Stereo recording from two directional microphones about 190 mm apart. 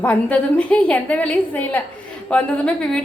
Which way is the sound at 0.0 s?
10° left (ahead or behind).